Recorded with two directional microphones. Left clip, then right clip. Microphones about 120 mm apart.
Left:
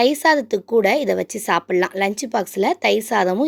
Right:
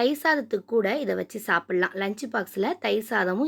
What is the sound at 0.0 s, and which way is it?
A woman's voice, 55° left (ahead or behind).